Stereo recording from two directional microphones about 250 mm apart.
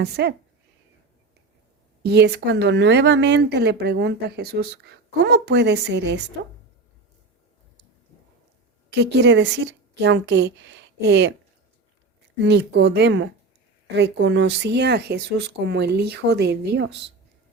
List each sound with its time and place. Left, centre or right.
0.0 s a woman's voice: right
2.0 s speech: right
8.9 s a woman's voice: right
12.4 s speech: right